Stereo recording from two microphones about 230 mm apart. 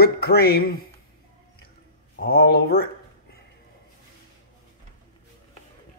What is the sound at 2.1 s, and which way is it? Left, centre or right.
Speech, left.